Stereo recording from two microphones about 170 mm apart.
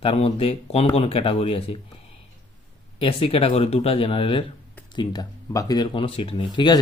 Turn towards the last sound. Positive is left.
turn(degrees=30)  # may be behind; listen again after turning